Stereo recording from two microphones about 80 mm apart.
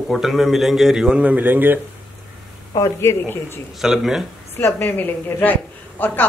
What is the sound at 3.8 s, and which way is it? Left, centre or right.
Speech, centre.